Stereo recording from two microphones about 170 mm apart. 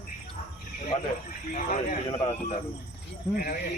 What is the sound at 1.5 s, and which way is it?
Speech, 45° left (ahead or behind).